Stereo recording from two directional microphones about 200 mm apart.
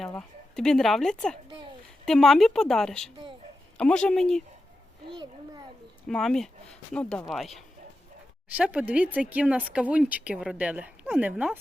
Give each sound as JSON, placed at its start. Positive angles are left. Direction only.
{"t": 0.2, "sound": "speech", "side_deg": 5}
{"t": 5.0, "sound": "a child's voice", "side_deg": -25}
{"t": 6.1, "sound": "speech", "side_deg": 0}